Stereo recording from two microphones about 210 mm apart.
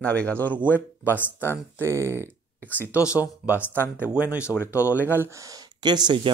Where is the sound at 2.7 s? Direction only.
10° left (ahead or behind).